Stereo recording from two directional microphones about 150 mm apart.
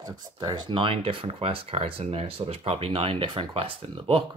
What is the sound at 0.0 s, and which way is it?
Speech, 25° right (ahead or behind).